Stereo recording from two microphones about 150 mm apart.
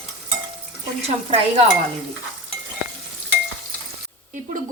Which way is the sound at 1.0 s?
45° right (ahead or behind).